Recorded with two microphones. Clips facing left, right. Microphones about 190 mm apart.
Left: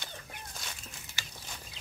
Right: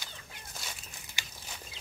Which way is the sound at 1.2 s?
15° right (ahead or behind).